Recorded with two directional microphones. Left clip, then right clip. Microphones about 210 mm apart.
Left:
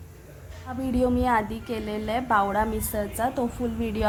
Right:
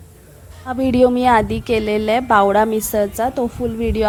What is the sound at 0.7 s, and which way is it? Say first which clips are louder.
A woman's voice: right 11 dB; 35° right (ahead or behind).